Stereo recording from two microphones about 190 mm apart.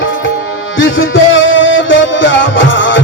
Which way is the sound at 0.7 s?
90° left.